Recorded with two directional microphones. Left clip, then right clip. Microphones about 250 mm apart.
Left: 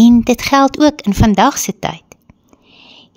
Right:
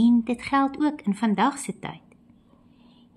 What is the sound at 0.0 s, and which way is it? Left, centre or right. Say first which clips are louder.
Speech: left 12 dB; left.